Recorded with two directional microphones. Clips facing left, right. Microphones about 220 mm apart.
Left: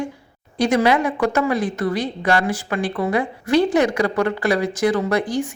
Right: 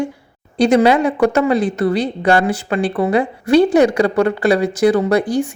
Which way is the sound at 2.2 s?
25° right (ahead or behind).